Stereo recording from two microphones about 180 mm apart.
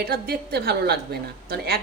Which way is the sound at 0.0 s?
60° right (ahead or behind).